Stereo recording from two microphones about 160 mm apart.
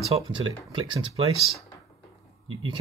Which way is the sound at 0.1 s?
30° right (ahead or behind).